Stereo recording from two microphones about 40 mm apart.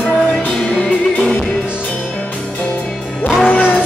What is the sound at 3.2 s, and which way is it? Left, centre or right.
Music, left.